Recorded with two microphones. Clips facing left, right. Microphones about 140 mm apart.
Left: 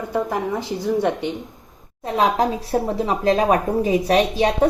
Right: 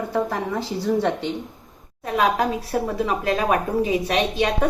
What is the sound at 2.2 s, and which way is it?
A woman's voice, 30° left (ahead or behind).